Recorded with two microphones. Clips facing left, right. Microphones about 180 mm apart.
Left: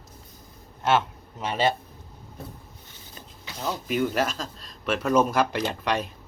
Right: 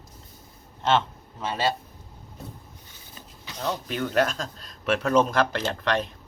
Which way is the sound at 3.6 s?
5° left (ahead or behind).